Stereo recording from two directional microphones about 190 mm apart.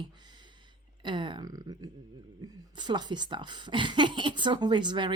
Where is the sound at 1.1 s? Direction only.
25° right (ahead or behind).